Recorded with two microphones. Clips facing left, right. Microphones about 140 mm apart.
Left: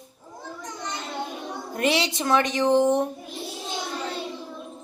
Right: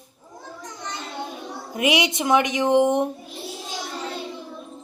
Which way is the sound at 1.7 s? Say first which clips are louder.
Right 2 dB; 10° right (ahead or behind).